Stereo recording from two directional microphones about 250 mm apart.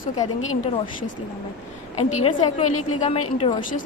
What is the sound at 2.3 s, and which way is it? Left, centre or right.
A woman's voice, centre.